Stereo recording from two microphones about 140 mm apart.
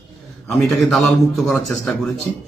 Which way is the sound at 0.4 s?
Centre (ahead or behind).